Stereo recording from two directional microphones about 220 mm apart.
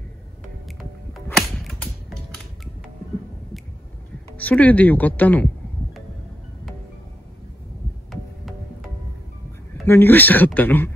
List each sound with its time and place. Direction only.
0.7 s a sound: centre (ahead or behind)
4.4 s speech: 5° left (ahead or behind)
9.8 s speech: 10° left (ahead or behind)